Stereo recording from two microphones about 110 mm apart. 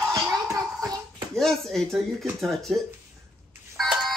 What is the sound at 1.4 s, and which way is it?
Speech, 5° left (ahead or behind).